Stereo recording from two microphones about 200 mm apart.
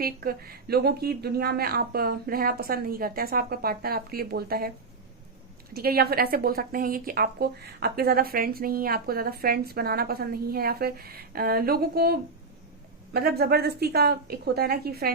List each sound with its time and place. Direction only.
0.0 s a woman's voice: 50° right (ahead or behind)
5.7 s a woman's voice: 50° right (ahead or behind)